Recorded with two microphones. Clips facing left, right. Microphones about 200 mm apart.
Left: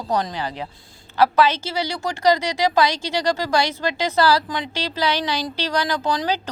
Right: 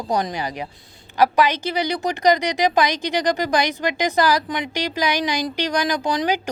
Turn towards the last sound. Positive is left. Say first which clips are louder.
# right 1 dB
turn(degrees=-15)  # may be behind; listen again after turning